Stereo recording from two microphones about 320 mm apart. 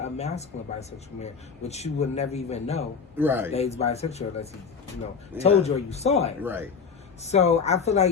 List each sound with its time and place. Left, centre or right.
0.0 s speech: centre
3.2 s a man's voice: centre
3.5 s speech: centre
6.4 s a man's voice: centre
7.2 s speech: left